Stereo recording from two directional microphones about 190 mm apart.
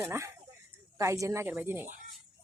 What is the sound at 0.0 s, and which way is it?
A woman's voice, 15° right (ahead or behind).